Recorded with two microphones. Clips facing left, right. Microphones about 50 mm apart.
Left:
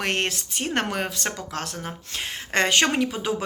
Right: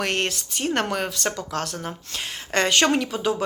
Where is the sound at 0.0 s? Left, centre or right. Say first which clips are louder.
Right 1 dB; left.